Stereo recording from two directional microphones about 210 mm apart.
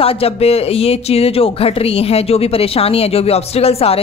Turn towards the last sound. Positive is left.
turn(degrees=30)  # may be behind; listen again after turning